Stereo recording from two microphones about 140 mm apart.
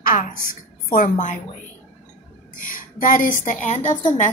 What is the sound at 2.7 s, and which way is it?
Speech, 75° left (ahead or behind).